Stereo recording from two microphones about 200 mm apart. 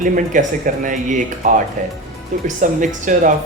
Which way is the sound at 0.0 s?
40° right (ahead or behind).